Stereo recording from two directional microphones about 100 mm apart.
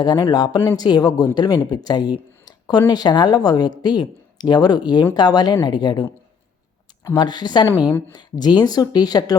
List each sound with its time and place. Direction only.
0.0 s speech: 45° left (ahead or behind)
7.2 s speech: 45° left (ahead or behind)